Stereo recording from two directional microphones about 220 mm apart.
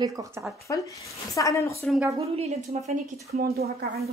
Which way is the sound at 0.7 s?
15° left (ahead or behind).